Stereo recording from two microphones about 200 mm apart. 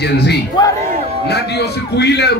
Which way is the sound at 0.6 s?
20° left (ahead or behind).